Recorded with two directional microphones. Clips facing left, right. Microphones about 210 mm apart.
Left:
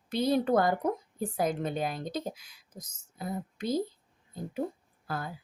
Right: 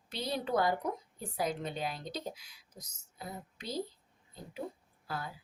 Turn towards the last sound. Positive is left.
turn(degrees=50)  # may be behind; listen again after turning